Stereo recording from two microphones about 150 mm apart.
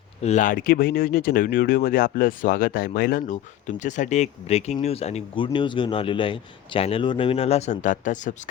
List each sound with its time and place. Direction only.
0.2 s speech: 50° left (ahead or behind)
3.8 s a man's voice: 55° left (ahead or behind)